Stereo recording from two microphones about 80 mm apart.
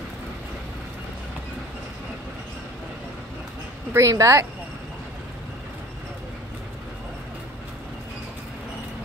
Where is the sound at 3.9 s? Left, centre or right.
Right.